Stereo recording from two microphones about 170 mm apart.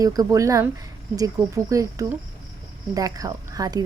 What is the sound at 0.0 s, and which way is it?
A woman's voice, 20° right (ahead or behind).